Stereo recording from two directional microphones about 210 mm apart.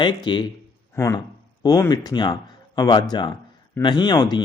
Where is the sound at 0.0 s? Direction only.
20° left (ahead or behind).